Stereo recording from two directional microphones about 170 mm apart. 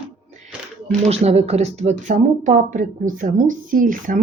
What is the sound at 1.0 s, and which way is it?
Speech, 40° right (ahead or behind).